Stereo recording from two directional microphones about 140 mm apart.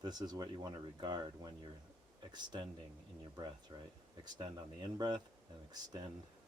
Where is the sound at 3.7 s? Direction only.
35° right (ahead or behind).